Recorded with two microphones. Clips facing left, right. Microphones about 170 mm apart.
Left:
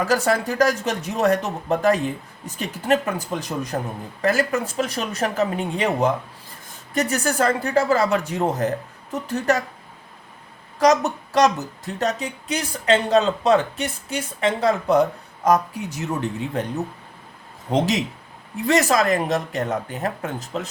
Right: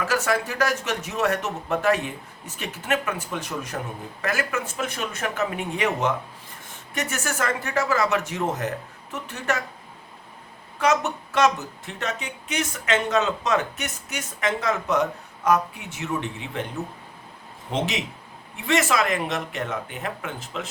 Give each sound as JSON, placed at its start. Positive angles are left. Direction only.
{"t": 0.0, "sound": "speech", "side_deg": 35}
{"t": 10.8, "sound": "speech", "side_deg": 35}
{"t": 17.7, "sound": "speech", "side_deg": 40}